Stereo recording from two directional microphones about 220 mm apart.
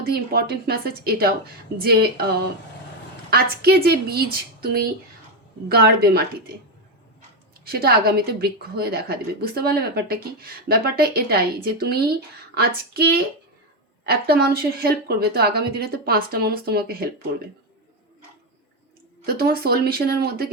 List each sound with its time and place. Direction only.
0.0 s a woman's voice: 45° right (ahead or behind)
7.6 s a woman's voice: 45° right (ahead or behind)
19.2 s a woman's voice: 45° right (ahead or behind)